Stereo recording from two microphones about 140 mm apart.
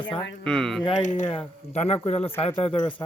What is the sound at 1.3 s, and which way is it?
Speech, 50° left (ahead or behind).